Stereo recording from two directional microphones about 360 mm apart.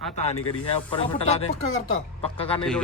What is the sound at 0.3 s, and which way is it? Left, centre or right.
Speech, left.